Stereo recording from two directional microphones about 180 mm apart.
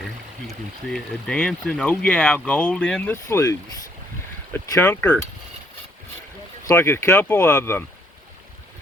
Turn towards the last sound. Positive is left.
turn(degrees=15)  # may be behind; listen again after turning